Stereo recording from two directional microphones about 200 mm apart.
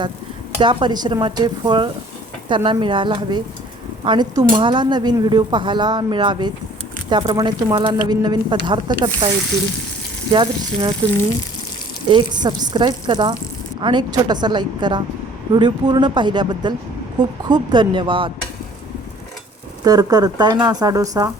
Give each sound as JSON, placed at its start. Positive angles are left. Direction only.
{"t": 0.6, "sound": "speech", "side_deg": -25}
{"t": 10.3, "sound": "speech", "side_deg": -25}
{"t": 12.0, "sound": "speech", "side_deg": -20}
{"t": 19.8, "sound": "speech", "side_deg": -20}